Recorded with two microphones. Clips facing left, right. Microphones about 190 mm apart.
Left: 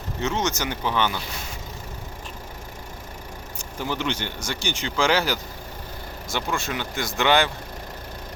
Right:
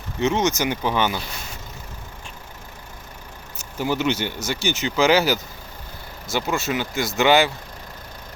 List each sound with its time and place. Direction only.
0.2 s speech: 15° right (ahead or behind)
3.6 s speech: 10° right (ahead or behind)